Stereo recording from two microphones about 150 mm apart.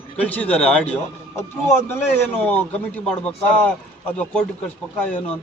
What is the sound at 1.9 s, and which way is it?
Speech, 15° left (ahead or behind).